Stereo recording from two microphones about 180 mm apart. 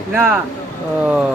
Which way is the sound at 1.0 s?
5° right (ahead or behind).